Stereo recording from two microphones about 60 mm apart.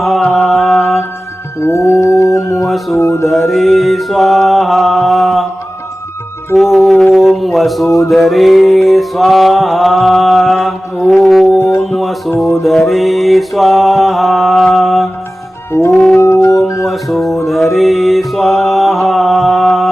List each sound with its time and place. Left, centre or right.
0.0 s mantra: centre
1.6 s dog: left
2.9 s a sound: left
3.2 s mantra: centre
6.6 s mantra: centre
7.1 s a sound: centre
8.0 s music: centre
11.5 s music: left
11.8 s music: centre
12.6 s mantra: centre
16.0 s music: centre
16.2 s music: left
16.8 s music: centre
17.4 s mantra: centre